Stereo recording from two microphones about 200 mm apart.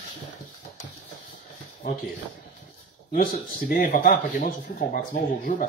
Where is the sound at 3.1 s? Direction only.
45° left (ahead or behind).